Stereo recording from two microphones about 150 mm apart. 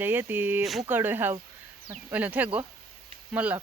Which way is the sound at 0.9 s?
15° right (ahead or behind).